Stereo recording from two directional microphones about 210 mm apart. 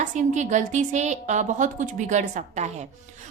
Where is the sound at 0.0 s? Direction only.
35° right (ahead or behind).